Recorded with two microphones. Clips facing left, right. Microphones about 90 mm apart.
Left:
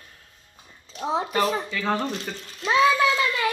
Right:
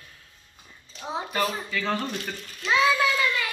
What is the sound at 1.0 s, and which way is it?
Speech, 90° left.